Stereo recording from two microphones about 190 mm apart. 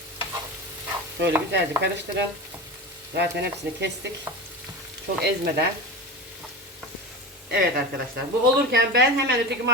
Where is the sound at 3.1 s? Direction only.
60° right (ahead or behind).